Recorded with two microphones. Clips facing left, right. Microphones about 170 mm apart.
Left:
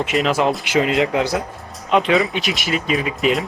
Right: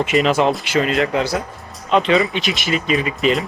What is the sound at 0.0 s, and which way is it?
Speech, centre (ahead or behind).